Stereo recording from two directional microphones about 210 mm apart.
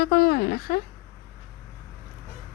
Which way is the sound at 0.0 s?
45° left (ahead or behind).